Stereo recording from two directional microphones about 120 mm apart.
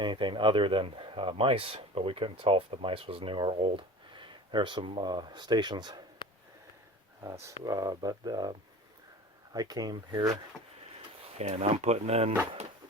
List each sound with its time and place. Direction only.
0.0 s speech: 40° right (ahead or behind)
7.6 s speech: 30° right (ahead or behind)
11.2 s speech: 60° right (ahead or behind)